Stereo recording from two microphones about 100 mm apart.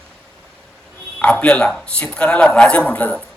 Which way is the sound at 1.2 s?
15° left (ahead or behind).